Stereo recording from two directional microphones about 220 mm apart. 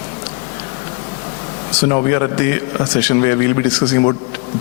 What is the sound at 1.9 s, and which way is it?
A man's voice, 20° left (ahead or behind).